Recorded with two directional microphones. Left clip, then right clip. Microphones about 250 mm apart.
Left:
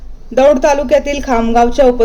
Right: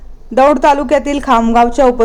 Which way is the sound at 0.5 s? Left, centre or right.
Centre.